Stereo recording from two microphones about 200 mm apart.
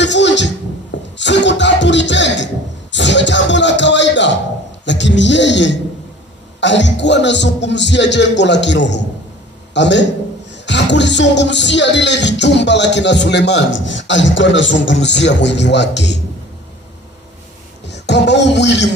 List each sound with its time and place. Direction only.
0.0 s music: 60° left (ahead or behind)
4.9 s speech: 65° left (ahead or behind)
17.8 s speech: 60° left (ahead or behind)